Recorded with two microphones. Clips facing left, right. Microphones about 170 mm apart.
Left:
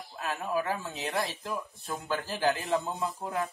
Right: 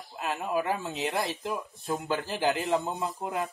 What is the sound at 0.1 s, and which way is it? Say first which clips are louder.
Speech: right 2 dB; 20° right (ahead or behind).